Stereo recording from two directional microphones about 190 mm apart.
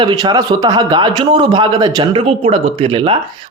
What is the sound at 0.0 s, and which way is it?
A man's voice, 25° right (ahead or behind).